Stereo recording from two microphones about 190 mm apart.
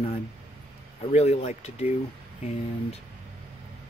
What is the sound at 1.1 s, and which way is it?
Speech, 35° left (ahead or behind).